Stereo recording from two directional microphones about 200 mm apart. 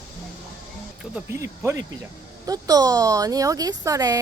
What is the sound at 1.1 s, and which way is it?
Speech, 15° right (ahead or behind).